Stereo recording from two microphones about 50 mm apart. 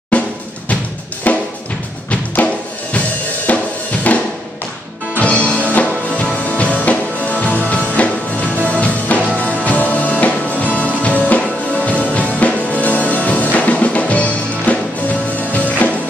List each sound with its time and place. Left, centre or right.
0.1 s music: left
3.5 s drum: left
4.1 s music: left